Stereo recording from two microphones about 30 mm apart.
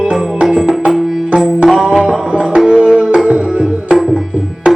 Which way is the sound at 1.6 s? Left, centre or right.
Right.